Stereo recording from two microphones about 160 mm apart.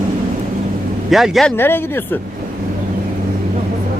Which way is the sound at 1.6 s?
15° left (ahead or behind).